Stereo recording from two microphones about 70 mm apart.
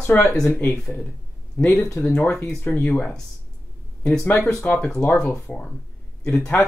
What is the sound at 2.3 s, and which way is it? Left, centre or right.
Speech, centre.